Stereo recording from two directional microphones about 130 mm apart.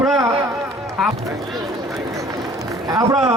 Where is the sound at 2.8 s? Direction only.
30° right (ahead or behind).